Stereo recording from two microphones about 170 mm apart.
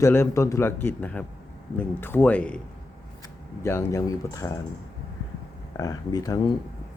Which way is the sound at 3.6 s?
15° left (ahead or behind).